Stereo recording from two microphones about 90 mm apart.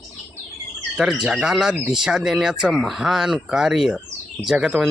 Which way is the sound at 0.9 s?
5° right (ahead or behind).